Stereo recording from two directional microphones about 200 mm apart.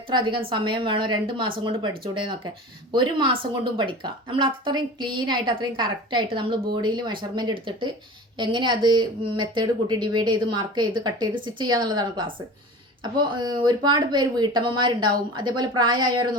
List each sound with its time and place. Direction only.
0.1 s speech: 25° right (ahead or behind)